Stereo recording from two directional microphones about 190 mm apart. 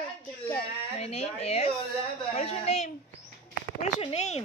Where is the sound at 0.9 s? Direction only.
35° left (ahead or behind).